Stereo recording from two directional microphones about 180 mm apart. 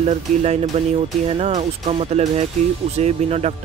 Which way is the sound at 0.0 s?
35° right (ahead or behind).